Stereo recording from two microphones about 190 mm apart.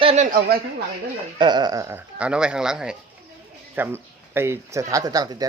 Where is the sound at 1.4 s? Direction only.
25° right (ahead or behind).